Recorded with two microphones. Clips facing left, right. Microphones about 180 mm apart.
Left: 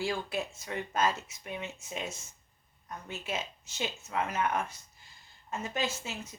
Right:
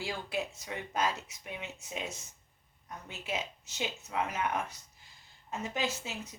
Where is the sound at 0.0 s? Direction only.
15° right (ahead or behind).